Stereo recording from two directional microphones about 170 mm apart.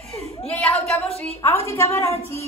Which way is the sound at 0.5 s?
5° left (ahead or behind).